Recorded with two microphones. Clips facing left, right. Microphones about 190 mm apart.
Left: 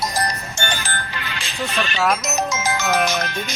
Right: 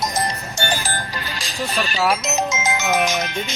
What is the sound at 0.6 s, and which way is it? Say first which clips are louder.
Speech: right 3 dB; 35° right (ahead or behind).